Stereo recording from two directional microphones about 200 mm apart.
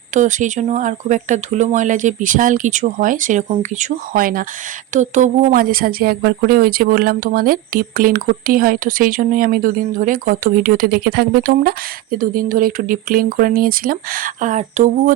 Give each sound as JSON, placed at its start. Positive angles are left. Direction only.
{"t": 0.1, "sound": "speech", "side_deg": -40}